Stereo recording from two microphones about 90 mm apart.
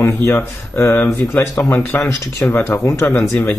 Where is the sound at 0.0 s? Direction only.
25° left (ahead or behind).